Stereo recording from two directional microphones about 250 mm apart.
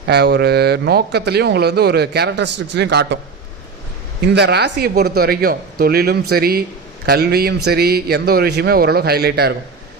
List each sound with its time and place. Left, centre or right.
0.0 s speech: right
4.4 s speech: right